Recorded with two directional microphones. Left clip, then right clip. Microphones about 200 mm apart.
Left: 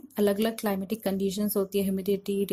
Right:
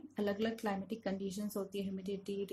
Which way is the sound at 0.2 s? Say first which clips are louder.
Left 11 dB; 45° left (ahead or behind).